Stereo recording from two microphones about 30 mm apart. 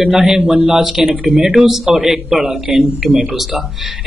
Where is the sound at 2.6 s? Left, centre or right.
Right.